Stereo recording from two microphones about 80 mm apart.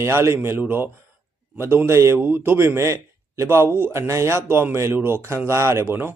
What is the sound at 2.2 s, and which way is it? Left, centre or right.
Speech, right.